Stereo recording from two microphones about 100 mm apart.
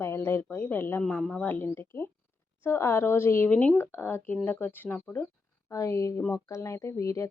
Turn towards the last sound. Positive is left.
turn(degrees=35)  # may be behind; listen again after turning